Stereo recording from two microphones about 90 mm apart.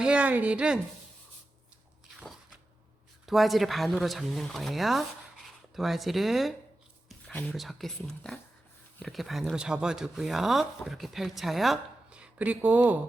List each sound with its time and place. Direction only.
0.0 s speech: 10° right (ahead or behind)
3.2 s speech: centre (ahead or behind)
7.5 s speech: centre (ahead or behind)
12.1 s speech: 15° right (ahead or behind)